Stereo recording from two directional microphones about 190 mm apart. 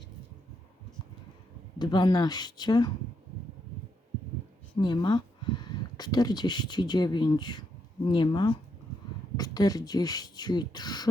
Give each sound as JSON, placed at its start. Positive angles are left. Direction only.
{"t": 1.8, "sound": "speech", "side_deg": 20}
{"t": 4.8, "sound": "speech", "side_deg": 25}